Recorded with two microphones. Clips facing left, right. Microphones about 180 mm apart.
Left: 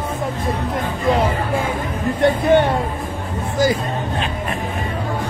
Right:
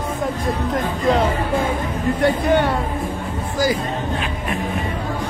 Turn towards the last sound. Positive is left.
turn(degrees=25)  # may be behind; listen again after turning